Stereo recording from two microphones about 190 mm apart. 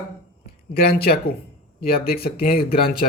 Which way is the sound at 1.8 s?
55° left (ahead or behind).